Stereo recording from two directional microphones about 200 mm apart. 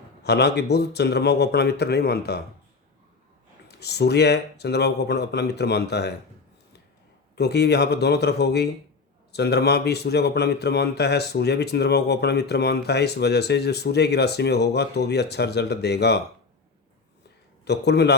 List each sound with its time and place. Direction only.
0.2 s a man's voice: 55° left (ahead or behind)
3.7 s a man's voice: 55° left (ahead or behind)
7.3 s a man's voice: 55° left (ahead or behind)
17.7 s a man's voice: 55° left (ahead or behind)